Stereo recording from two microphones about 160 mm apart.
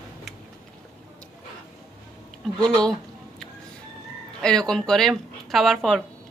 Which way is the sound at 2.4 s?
5° left (ahead or behind).